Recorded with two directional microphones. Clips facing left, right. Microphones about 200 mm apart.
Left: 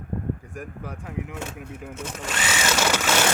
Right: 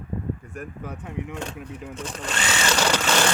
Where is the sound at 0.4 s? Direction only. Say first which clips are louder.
Right 1 dB; 15° left (ahead or behind).